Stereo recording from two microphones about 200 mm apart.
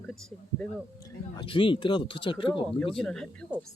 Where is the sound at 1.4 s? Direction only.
25° left (ahead or behind).